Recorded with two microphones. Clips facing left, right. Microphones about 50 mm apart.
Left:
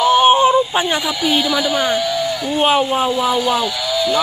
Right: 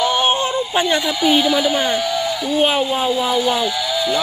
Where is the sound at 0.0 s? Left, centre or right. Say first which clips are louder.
Left 6 dB; centre.